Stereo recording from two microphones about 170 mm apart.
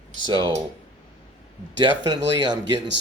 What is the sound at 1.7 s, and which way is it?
Speech, 25° right (ahead or behind).